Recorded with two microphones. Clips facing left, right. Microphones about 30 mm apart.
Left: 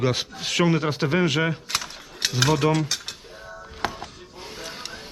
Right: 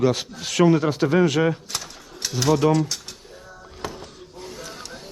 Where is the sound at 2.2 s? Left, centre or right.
Left.